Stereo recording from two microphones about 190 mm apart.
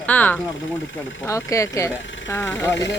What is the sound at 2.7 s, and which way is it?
Speech, 70° left (ahead or behind).